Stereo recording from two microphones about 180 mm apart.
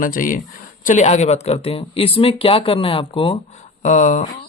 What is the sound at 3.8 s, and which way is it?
Speech, 45° left (ahead or behind).